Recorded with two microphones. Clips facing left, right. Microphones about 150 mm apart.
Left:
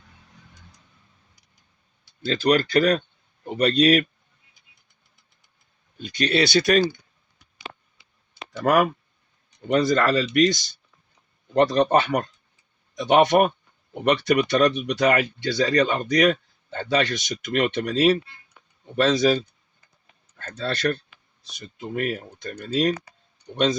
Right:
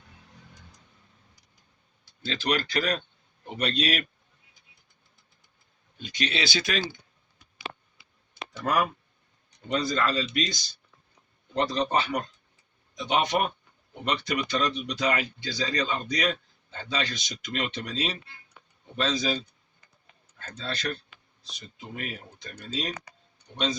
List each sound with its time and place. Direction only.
2.2 s speech: 40° left (ahead or behind)
6.1 s speech: 60° left (ahead or behind)
8.6 s speech: 65° left (ahead or behind)
9.6 s speech: 55° left (ahead or behind)
11.5 s speech: 55° left (ahead or behind)
14.0 s speech: 70° left (ahead or behind)
16.1 s speech: 50° left (ahead or behind)
17.0 s speech: 70° left (ahead or behind); by 18.2 s 55° left (ahead or behind)
18.9 s speech: 75° left (ahead or behind)
20.4 s speech: 70° left (ahead or behind)